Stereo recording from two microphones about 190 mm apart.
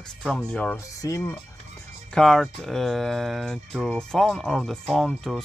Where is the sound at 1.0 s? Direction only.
15° left (ahead or behind).